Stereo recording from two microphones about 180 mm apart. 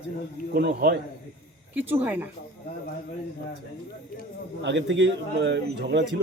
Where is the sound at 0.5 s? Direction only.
65° right (ahead or behind).